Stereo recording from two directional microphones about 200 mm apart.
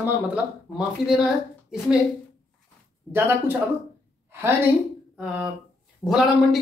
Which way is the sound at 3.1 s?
10° right (ahead or behind).